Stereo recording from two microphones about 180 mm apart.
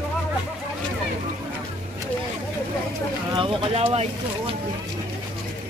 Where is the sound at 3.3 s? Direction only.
30° right (ahead or behind).